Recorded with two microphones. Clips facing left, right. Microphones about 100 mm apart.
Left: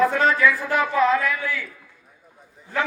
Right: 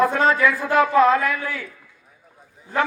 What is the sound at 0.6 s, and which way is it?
A woman's voice, 45° right (ahead or behind).